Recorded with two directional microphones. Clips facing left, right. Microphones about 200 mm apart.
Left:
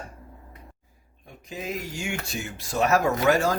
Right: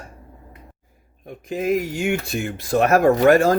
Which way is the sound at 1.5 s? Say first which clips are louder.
Right 11 dB; 60° right (ahead or behind).